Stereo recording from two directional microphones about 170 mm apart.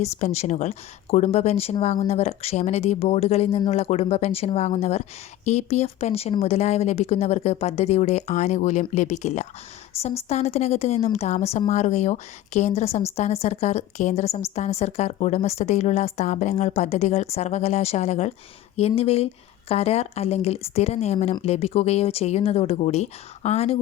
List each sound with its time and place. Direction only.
0.0 s a woman's voice: 40° left (ahead or behind)